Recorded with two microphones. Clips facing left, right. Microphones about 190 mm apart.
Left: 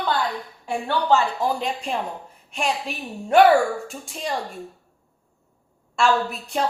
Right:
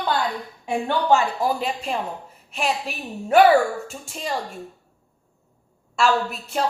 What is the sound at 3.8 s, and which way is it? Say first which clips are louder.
Speech: left 1 dB; centre (ahead or behind).